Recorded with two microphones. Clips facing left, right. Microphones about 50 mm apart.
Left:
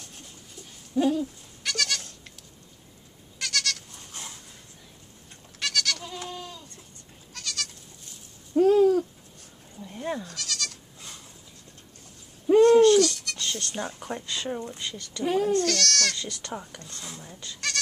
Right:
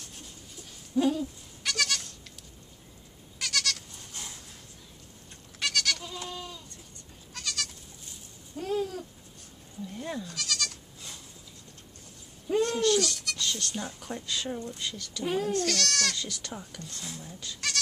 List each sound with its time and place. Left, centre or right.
0.9 s goat: centre
3.3 s goat: centre
5.6 s goat: centre
6.1 s goat: left
7.3 s goat: centre
8.5 s a sound: left
9.8 s a sound: centre
10.2 s goat: centre
12.4 s a sound: left
13.4 s speech: left
14.8 s speech: centre
15.5 s speech: centre
16.3 s speech: centre